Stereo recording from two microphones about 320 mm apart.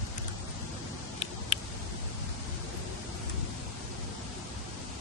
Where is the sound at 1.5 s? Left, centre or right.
Centre.